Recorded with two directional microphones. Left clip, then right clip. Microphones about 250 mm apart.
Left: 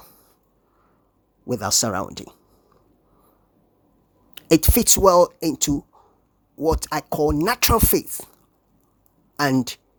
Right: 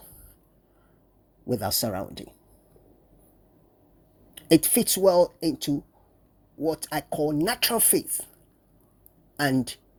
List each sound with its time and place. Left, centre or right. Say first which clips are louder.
1.5 s speech: left 5 dB; centre
4.4 s speech: left 3 dB; centre
9.3 s a sound: left 4 dB; centre
9.6 s speech: left 4 dB; centre